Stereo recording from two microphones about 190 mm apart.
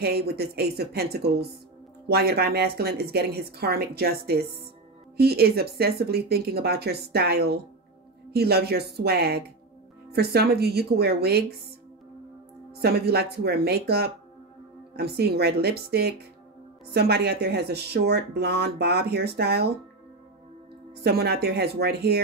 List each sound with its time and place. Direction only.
0.0 s speech: 55° right (ahead or behind)
12.8 s speech: 55° right (ahead or behind)
21.0 s speech: 60° right (ahead or behind)